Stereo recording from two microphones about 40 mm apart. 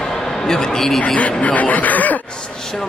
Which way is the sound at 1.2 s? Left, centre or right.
Left.